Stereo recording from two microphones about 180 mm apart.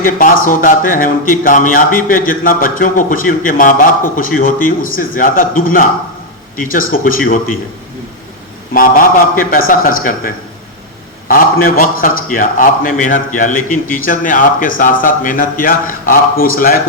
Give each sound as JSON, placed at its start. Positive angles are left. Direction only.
{"t": 0.0, "sound": "a man's voice", "side_deg": 50}
{"t": 8.7, "sound": "a man's voice", "side_deg": 50}